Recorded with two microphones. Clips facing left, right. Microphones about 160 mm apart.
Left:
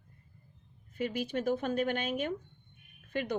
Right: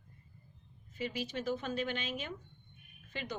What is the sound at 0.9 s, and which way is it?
Speech, 55° left (ahead or behind).